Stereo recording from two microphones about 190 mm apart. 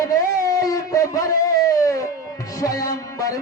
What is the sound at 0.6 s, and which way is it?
Music, 15° left (ahead or behind).